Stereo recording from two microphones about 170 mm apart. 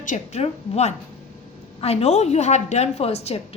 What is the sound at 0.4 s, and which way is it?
A woman's voice, 40° left (ahead or behind).